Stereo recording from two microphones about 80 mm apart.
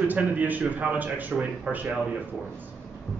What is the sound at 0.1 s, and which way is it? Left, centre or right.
A man's voice, right.